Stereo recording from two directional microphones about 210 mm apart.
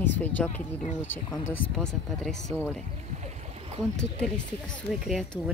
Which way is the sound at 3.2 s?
30° right (ahead or behind).